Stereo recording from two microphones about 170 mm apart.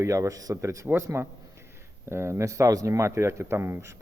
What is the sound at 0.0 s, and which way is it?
Speech, 20° right (ahead or behind).